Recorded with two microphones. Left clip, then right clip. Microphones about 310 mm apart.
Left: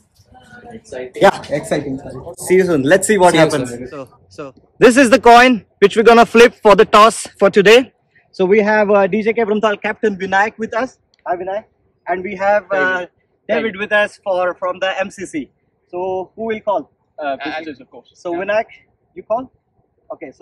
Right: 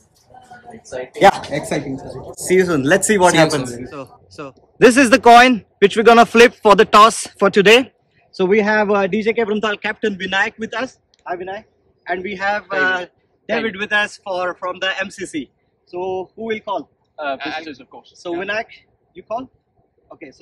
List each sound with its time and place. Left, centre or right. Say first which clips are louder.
0.8 s speech: even; centre
1.3 s speech: left 3 dB; centre